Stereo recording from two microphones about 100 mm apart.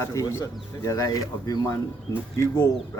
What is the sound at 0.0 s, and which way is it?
A man's voice, 30° left (ahead or behind).